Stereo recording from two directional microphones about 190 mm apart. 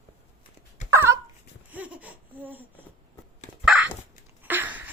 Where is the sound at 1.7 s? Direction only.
10° right (ahead or behind).